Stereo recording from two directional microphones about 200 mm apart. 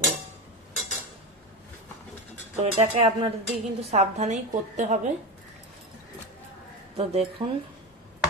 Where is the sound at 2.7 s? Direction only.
30° right (ahead or behind).